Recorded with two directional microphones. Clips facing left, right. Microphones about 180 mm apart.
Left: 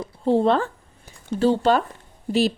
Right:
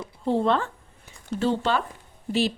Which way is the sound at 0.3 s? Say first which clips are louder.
Left 4 dB; 35° left (ahead or behind).